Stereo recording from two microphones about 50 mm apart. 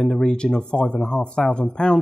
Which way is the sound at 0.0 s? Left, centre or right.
Centre.